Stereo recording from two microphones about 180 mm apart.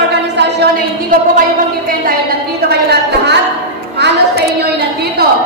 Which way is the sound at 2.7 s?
65° right (ahead or behind).